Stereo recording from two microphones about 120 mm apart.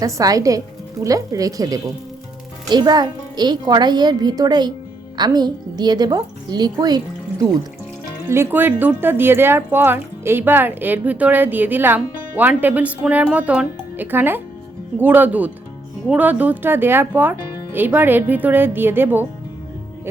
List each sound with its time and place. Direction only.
0.0 s a woman's voice: 30° right (ahead or behind)
8.3 s speech: 20° right (ahead or behind)